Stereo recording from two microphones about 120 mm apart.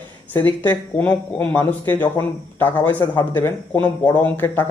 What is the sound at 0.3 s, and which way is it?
Speech, 15° left (ahead or behind).